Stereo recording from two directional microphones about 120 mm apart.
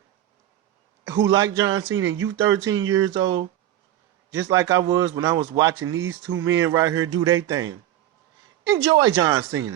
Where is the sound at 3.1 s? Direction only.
40° right (ahead or behind).